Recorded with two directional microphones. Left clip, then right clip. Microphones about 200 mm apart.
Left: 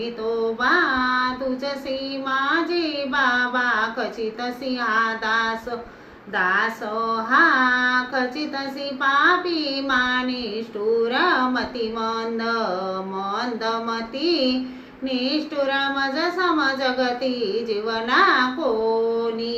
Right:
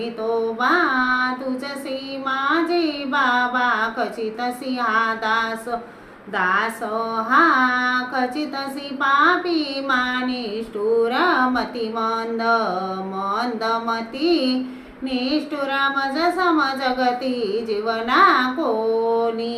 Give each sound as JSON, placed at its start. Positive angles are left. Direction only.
{"t": 0.6, "sound": "child singing", "side_deg": -20}
{"t": 2.2, "sound": "speech", "side_deg": -20}